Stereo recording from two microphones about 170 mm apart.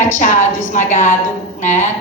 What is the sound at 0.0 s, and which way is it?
A woman's voice, 50° left (ahead or behind).